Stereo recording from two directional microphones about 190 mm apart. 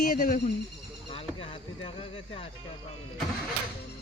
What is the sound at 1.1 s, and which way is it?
Speech, 30° left (ahead or behind).